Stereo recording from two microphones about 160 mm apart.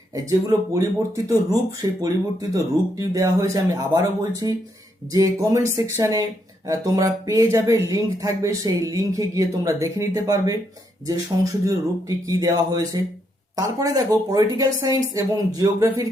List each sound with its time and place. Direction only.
0.1 s speech: 20° right (ahead or behind)